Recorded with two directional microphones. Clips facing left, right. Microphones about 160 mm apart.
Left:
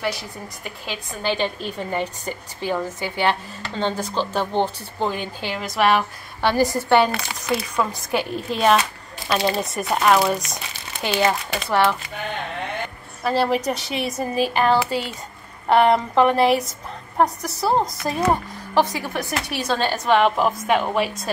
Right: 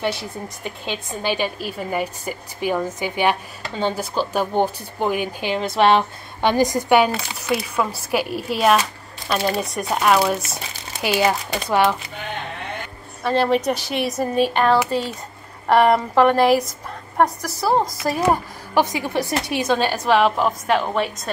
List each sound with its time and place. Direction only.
0.0 s a woman's voice: 25° right (ahead or behind)
5.6 s a woman's voice: 25° right (ahead or behind)
13.2 s a woman's voice: centre (ahead or behind)
18.3 s a woman's voice: 15° right (ahead or behind); by 21.1 s 5° left (ahead or behind)